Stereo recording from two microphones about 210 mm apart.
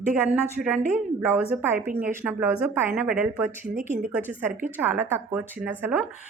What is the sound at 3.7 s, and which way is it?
Speech, 35° right (ahead or behind).